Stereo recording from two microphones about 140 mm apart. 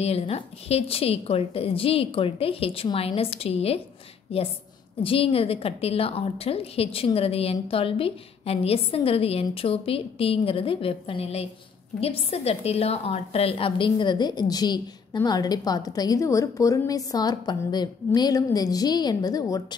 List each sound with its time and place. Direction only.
0.0 s a woman's voice: 45° left (ahead or behind); by 19.6 s 25° left (ahead or behind)